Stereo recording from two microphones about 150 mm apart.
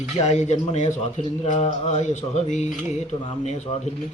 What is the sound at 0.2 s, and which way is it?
Speech, 50° left (ahead or behind).